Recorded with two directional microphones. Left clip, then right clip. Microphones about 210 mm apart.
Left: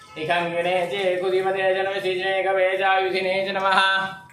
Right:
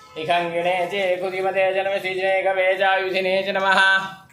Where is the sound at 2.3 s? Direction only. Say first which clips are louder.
Right 2 dB; 40° right (ahead or behind).